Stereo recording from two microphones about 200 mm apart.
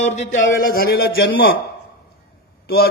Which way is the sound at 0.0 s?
35° left (ahead or behind).